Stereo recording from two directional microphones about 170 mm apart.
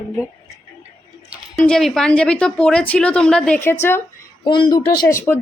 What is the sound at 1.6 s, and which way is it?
A woman's voice, 5° left (ahead or behind).